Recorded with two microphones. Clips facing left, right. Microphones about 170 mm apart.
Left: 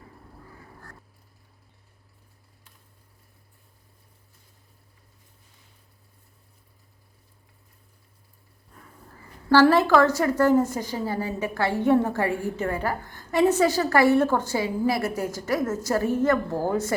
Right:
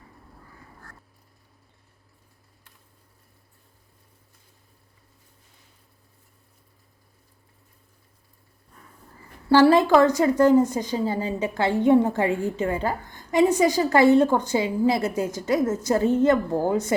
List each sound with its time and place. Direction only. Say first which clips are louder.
9.5 s a woman's voice: right 2 dB; 15° right (ahead or behind)